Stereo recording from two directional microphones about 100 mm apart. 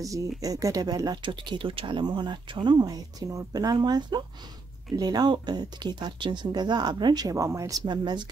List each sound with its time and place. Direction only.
0.0 s speech: 35° right (ahead or behind)
7.8 s speech: 50° right (ahead or behind)